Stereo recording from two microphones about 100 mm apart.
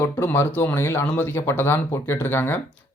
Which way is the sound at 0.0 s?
25° left (ahead or behind).